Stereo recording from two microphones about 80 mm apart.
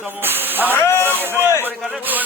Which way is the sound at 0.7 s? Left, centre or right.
Left.